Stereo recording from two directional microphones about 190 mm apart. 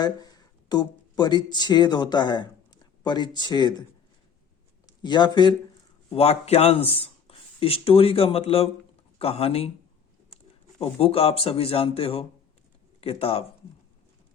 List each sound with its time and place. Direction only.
0.0 s speech: 20° left (ahead or behind)
4.9 s speech: 25° left (ahead or behind)
10.8 s speech: 30° left (ahead or behind)